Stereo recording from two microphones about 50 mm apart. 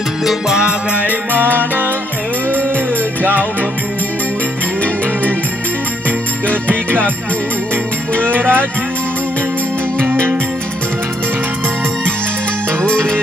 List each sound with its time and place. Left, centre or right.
0.2 s music: centre
0.6 s music: right
1.4 s music: right
8.4 s music: right
12.8 s music: centre